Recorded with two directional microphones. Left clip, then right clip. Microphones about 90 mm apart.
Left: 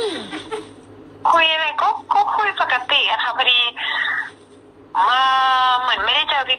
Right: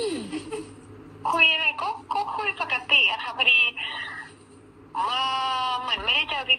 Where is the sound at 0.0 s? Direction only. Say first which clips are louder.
Left 5 dB; 45° left (ahead or behind).